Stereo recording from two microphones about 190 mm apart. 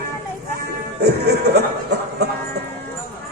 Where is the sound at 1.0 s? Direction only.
60° right (ahead or behind).